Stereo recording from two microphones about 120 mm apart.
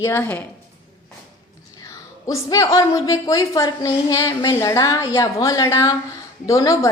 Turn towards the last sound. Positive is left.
turn(degrees=30)  # may be behind; listen again after turning